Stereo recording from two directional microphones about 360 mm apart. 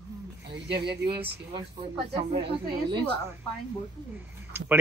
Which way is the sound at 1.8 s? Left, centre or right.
Centre.